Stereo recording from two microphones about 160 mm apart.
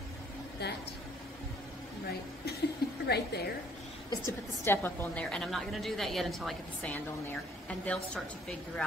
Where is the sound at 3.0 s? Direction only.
90° left.